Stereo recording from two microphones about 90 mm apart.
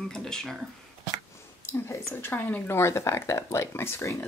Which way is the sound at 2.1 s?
20° left (ahead or behind).